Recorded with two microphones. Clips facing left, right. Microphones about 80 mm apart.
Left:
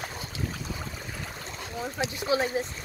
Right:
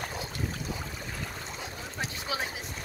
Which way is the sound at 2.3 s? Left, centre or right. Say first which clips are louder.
Left 9 dB; left.